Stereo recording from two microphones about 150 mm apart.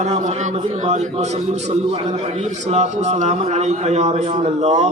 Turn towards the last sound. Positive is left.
turn(degrees=-50)  # may be behind; listen again after turning